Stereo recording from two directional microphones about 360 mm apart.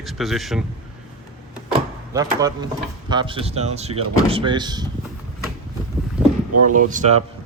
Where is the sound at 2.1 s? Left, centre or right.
Centre.